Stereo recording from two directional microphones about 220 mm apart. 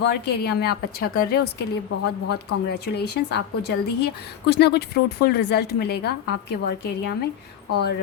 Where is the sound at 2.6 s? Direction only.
50° left (ahead or behind).